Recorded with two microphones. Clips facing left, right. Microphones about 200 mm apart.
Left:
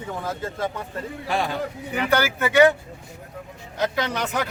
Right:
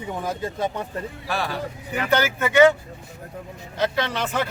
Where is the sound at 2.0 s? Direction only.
10° left (ahead or behind).